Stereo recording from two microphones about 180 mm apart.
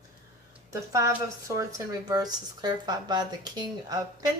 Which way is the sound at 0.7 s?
20° right (ahead or behind).